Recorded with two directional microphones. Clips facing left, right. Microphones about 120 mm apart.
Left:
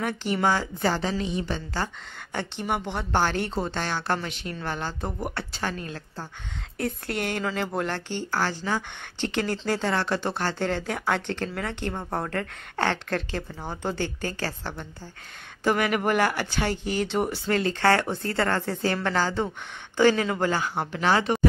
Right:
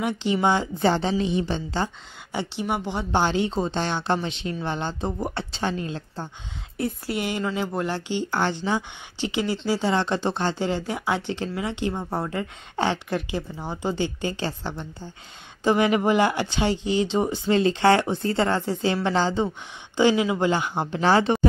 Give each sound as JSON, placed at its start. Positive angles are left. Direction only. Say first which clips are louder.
{"t": 0.0, "sound": "speech", "louder": "right 3 dB", "side_deg": -20}
{"t": 2.6, "sound": "speech", "louder": "right 1 dB", "side_deg": -5}
{"t": 6.8, "sound": "speech", "louder": "right 2 dB", "side_deg": -5}
{"t": 13.9, "sound": "speech", "louder": "right 3 dB", "side_deg": -20}